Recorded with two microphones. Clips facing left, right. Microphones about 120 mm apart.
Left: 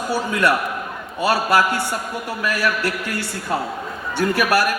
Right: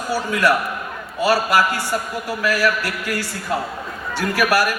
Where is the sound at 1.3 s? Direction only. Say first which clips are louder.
Even; 25° left (ahead or behind).